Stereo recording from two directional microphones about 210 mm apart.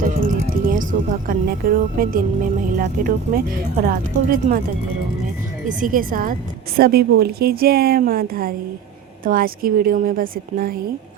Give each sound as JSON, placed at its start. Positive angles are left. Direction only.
{"t": 0.0, "sound": "a woman's voice", "side_deg": -40}
{"t": 5.6, "sound": "a woman's voice", "side_deg": -40}